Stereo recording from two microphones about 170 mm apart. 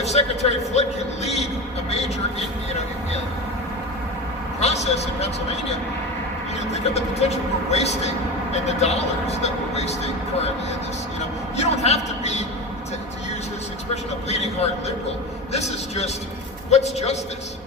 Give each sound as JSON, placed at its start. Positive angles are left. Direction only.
{"t": 0.0, "sound": "speech", "side_deg": 40}
{"t": 4.6, "sound": "speech", "side_deg": 40}
{"t": 11.5, "sound": "speech", "side_deg": 40}
{"t": 13.9, "sound": "speech", "side_deg": 40}